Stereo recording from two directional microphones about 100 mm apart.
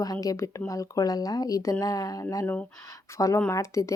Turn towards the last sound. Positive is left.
turn(degrees=30)  # may be behind; listen again after turning